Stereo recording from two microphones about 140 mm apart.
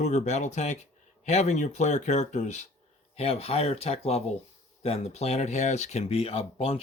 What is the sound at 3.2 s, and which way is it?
Speech, 45° left (ahead or behind).